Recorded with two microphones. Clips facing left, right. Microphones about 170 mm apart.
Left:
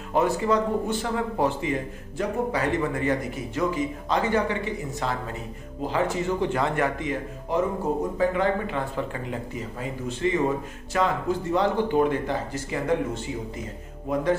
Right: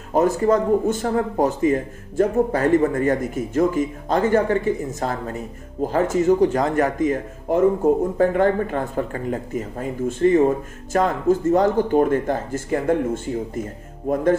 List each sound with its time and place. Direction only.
0.1 s a man's voice: 45° right (ahead or behind)